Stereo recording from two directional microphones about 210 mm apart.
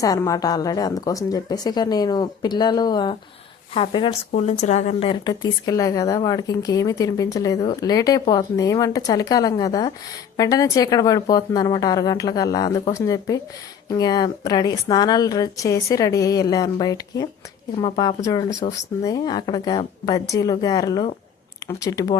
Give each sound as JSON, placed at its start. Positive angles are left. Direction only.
{"t": 0.0, "sound": "a woman's voice", "side_deg": 15}